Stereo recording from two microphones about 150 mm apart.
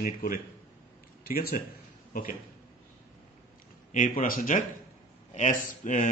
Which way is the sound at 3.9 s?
65° left (ahead or behind).